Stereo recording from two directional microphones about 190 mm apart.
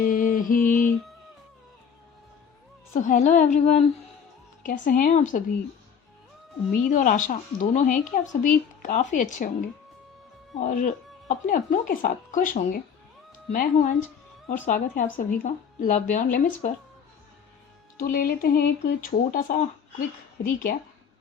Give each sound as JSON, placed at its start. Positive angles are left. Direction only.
{"t": 0.1, "sound": "a sound", "side_deg": 45}
{"t": 2.9, "sound": "speech", "side_deg": 40}
{"t": 6.8, "sound": "speech", "side_deg": 45}
{"t": 10.6, "sound": "speech", "side_deg": 45}
{"t": 18.0, "sound": "speech", "side_deg": 50}